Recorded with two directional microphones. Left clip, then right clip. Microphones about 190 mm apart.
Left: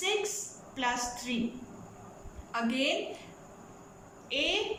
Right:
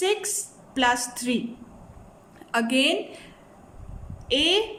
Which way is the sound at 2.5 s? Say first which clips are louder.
Right 8 dB; 50° right (ahead or behind).